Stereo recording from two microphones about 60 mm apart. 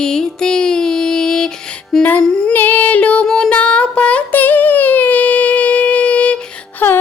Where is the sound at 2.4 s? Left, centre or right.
Left.